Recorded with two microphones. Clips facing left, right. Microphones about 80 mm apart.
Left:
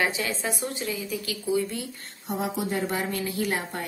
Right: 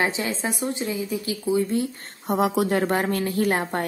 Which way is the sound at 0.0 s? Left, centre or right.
Right.